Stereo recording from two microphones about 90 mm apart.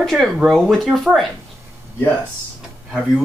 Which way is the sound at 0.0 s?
Centre (ahead or behind).